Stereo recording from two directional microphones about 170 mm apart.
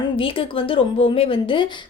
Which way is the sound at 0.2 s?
30° left (ahead or behind).